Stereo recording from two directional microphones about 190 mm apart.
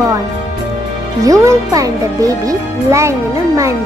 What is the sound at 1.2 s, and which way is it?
Speech, 15° right (ahead or behind).